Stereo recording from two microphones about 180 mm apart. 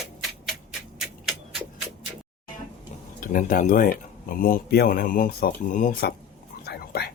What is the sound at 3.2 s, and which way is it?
Speech, 50° left (ahead or behind).